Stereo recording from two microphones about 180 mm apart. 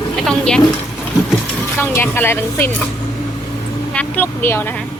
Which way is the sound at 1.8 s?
10° left (ahead or behind).